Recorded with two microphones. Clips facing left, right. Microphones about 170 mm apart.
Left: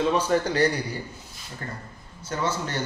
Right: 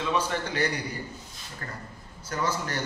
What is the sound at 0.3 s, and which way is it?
Speech, 35° left (ahead or behind).